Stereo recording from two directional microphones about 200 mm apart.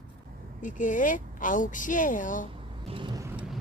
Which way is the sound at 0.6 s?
40° left (ahead or behind).